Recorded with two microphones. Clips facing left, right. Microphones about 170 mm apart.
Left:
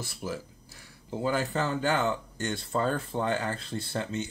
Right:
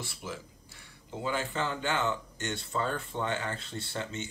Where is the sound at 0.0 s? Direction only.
40° left (ahead or behind).